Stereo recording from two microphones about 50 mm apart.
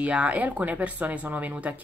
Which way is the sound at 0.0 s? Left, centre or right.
Right.